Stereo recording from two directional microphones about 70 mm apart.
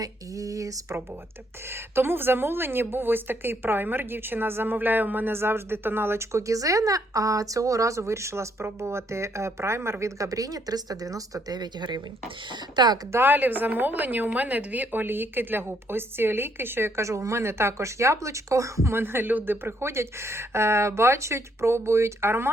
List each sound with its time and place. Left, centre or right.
0.0 s a sound: right
1.7 s a woman's voice: right
11.5 s speech: right
13.1 s a woman's voice: right